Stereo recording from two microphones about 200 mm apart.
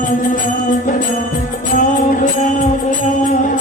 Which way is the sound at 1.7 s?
40° left (ahead or behind).